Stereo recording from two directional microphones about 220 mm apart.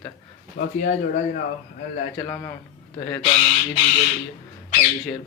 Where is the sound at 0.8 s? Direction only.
35° left (ahead or behind).